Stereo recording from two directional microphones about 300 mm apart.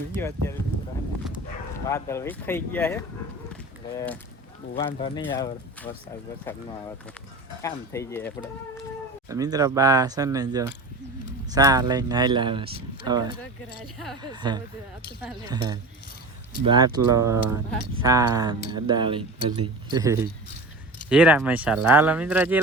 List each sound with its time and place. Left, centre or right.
0.2 s speech: centre
1.7 s speech: centre
4.8 s speech: centre
7.6 s speech: centre
9.3 s speech: centre